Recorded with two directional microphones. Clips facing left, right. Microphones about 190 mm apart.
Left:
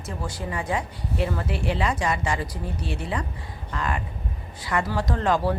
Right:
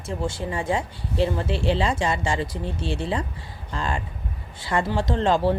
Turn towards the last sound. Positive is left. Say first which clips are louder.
# right 2 dB
turn(degrees=-25)  # may be behind; listen again after turning